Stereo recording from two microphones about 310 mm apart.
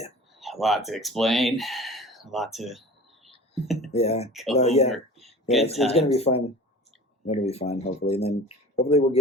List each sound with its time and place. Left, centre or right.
0.3 s speech: centre
3.9 s speech: centre
4.3 s speech: centre
4.5 s speech: left
5.2 s a sound: centre
5.8 s speech: centre